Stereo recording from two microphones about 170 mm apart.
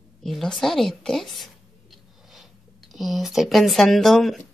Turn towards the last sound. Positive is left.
turn(degrees=0)  # may be behind; listen again after turning